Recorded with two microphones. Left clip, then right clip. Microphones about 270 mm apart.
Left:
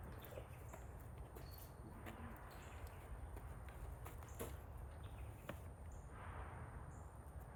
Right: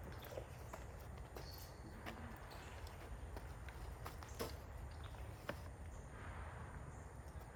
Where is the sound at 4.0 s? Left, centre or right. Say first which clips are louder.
Right 5 dB; right.